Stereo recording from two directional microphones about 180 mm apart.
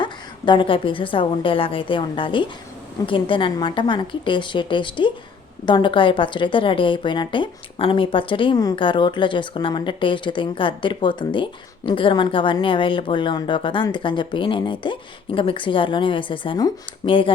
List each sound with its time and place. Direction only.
0.0 s a woman's voice: 25° left (ahead or behind)